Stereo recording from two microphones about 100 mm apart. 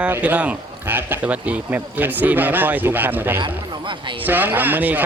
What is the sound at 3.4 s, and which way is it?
Speech, 55° right (ahead or behind).